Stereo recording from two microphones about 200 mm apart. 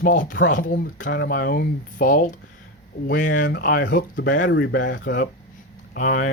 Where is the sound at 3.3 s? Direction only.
70° left (ahead or behind).